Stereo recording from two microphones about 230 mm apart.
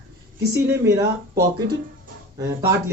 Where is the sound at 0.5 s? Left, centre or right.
Centre.